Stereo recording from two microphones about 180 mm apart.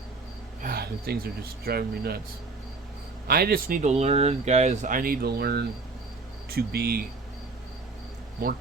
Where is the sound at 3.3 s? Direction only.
55° right (ahead or behind).